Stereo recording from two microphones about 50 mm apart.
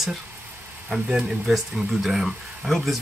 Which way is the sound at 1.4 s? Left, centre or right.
Centre.